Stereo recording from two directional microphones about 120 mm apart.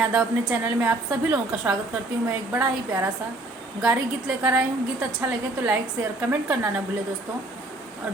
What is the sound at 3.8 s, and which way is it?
Speech, 10° right (ahead or behind).